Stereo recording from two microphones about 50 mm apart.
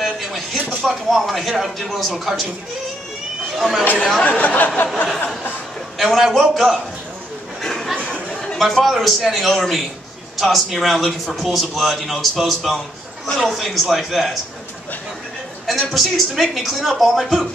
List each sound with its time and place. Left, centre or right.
0.0 s a sound: centre
0.8 s speech: centre
3.5 s speech: centre
4.2 s speech: left
5.9 s speech: centre
7.6 s a sound: centre
8.1 s chatter: centre
8.5 s speech: centre
15.6 s speech: centre